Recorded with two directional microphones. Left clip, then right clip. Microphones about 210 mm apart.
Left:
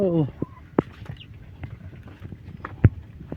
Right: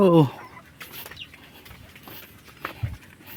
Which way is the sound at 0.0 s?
45° right (ahead or behind).